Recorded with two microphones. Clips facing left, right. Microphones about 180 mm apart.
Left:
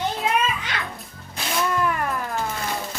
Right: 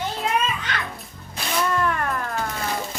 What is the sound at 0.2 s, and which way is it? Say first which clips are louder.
Music: left 1 dB; centre (ahead or behind).